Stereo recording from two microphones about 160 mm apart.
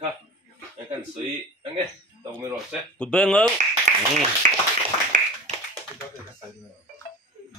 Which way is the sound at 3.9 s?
55° right (ahead or behind).